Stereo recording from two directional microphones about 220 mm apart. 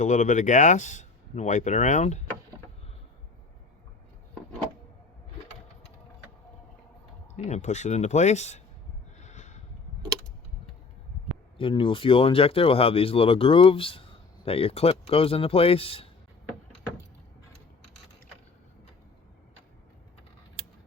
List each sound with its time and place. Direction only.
0.0 s speech: 35° left (ahead or behind)
7.3 s speech: 30° left (ahead or behind)
9.2 s a sound: 30° left (ahead or behind)
11.5 s speech: 25° left (ahead or behind)